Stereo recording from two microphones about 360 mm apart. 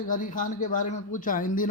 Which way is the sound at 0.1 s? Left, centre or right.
Left.